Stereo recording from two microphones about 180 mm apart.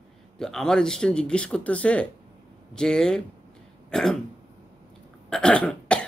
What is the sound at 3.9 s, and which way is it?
Throat clearing, 5° left (ahead or behind).